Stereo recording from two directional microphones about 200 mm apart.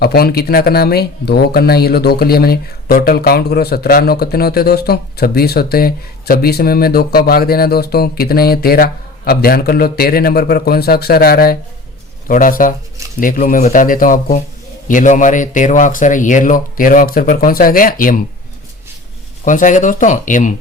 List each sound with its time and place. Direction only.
0.0 s speech: 50° left (ahead or behind)
19.5 s speech: 40° left (ahead or behind)